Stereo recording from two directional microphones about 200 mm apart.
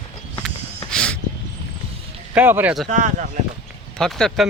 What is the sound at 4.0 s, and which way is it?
Speech, 5° left (ahead or behind).